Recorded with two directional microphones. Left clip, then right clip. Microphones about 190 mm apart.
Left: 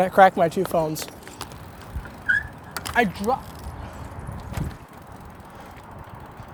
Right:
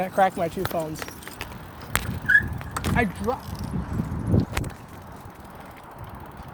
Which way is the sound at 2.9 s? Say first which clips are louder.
Left 5 dB; 45° left (ahead or behind).